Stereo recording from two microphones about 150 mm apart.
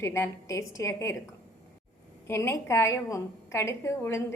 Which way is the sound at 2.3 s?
15° left (ahead or behind).